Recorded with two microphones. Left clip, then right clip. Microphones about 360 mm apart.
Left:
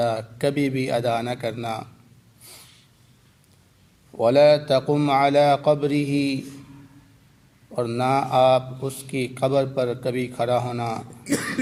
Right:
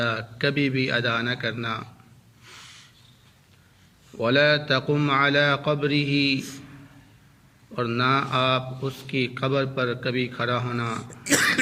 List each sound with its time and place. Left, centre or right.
0.0 s a man's voice: centre
4.2 s a man's voice: centre
7.8 s a man's voice: centre
11.2 s speech: right